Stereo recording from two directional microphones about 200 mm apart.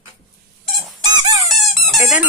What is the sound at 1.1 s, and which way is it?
Squeak, 20° right (ahead or behind).